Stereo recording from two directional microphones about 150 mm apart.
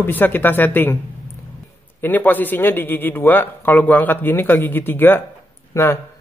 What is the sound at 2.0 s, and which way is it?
A man's voice, 10° left (ahead or behind).